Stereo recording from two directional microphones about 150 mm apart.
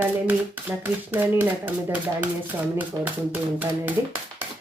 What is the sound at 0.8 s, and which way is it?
Speech, 15° right (ahead or behind).